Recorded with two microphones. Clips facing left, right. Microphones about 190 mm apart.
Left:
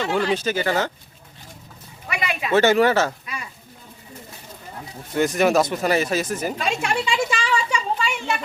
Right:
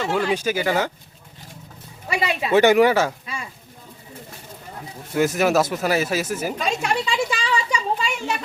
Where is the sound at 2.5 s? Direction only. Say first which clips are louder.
Right 2 dB; 15° right (ahead or behind).